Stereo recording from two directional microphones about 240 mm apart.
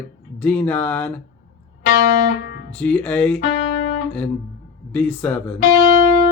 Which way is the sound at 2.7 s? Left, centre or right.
Centre.